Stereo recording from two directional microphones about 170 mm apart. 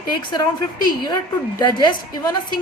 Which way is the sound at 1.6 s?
25° left (ahead or behind).